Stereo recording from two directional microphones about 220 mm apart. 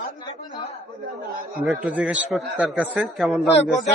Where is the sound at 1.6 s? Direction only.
5° right (ahead or behind).